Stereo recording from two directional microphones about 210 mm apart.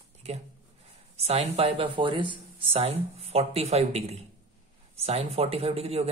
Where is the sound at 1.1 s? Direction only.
30° right (ahead or behind).